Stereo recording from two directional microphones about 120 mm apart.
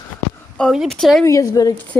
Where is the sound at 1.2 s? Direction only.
30° left (ahead or behind).